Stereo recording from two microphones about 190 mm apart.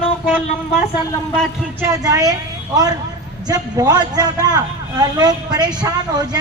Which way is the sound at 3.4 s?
20° right (ahead or behind).